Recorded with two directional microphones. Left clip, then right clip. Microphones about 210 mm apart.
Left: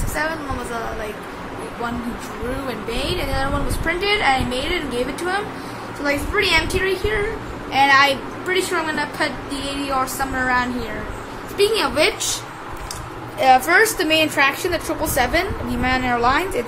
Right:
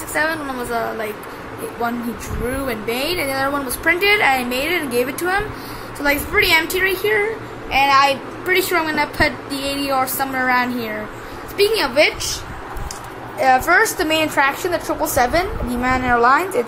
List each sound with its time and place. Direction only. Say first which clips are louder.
0.2 s a woman's voice: right 4 dB; 20° right (ahead or behind)
2.7 s a woman's voice: right 3 dB; 25° right (ahead or behind)
7.8 s a woman's voice: even; centre (ahead or behind)
8.5 s a woman's voice: right 3 dB; 25° right (ahead or behind)
13.4 s a woman's voice: even; centre (ahead or behind)